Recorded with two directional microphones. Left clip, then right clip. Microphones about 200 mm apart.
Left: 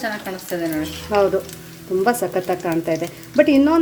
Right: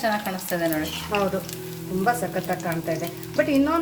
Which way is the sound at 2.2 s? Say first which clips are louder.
Left 6 dB; 40° left (ahead or behind).